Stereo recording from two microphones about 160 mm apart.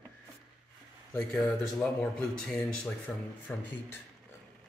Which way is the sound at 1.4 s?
5° left (ahead or behind).